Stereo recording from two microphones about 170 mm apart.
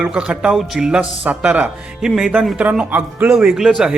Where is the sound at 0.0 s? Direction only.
5° right (ahead or behind).